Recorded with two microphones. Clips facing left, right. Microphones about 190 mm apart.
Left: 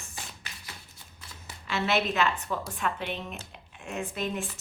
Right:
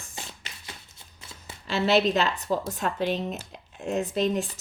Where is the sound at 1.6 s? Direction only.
35° right (ahead or behind).